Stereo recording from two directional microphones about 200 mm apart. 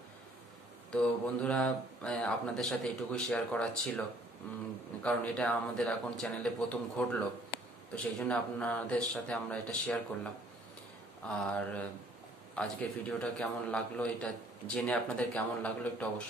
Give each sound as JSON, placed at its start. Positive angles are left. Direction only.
{"t": 0.9, "sound": "a man's voice", "side_deg": 5}
{"t": 5.0, "sound": "a man's voice", "side_deg": 5}
{"t": 11.4, "sound": "a man's voice", "side_deg": 5}